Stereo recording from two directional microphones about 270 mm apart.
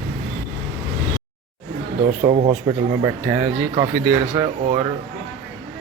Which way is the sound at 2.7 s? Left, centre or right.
Centre.